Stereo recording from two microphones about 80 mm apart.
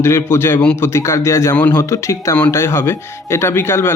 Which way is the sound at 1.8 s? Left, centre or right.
Left.